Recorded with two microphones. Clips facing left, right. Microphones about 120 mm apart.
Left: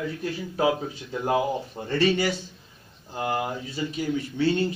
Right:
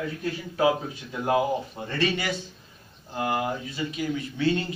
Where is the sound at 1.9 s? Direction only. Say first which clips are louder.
Left 5 dB; 30° left (ahead or behind).